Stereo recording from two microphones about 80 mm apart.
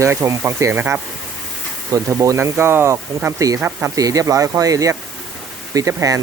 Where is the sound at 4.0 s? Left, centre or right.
Right.